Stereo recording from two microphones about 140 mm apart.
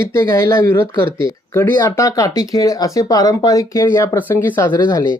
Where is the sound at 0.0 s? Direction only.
20° left (ahead or behind).